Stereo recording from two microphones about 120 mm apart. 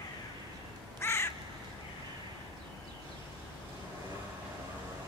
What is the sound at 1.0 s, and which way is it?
Crow, 25° left (ahead or behind).